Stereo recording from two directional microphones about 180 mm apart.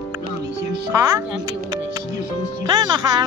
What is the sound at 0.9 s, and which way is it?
Speech, 20° right (ahead or behind).